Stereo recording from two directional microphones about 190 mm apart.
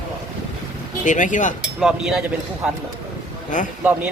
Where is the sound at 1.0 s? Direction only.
40° left (ahead or behind).